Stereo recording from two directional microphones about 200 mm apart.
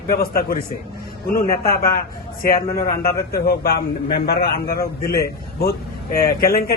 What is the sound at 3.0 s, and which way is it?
A man's voice, 50° left (ahead or behind).